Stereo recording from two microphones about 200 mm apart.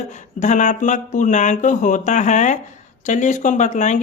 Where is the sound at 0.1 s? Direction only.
35° left (ahead or behind).